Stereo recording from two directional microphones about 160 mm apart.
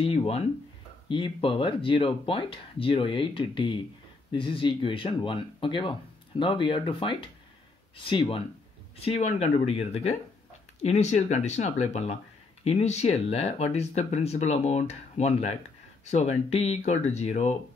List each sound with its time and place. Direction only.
0.0 s speech: 35° left (ahead or behind)